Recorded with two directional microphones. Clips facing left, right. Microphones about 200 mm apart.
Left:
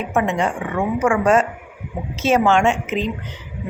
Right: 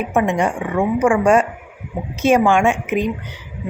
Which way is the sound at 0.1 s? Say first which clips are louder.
Right 1 dB; 15° right (ahead or behind).